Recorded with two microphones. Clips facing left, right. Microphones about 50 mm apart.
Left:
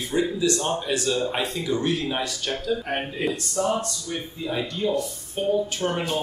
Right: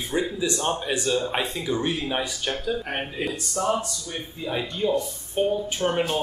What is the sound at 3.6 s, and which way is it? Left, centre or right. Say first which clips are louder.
Speech: right 1 dB; centre.